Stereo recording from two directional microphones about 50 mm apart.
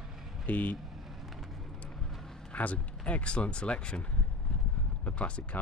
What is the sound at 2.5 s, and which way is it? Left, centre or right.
Speech, left.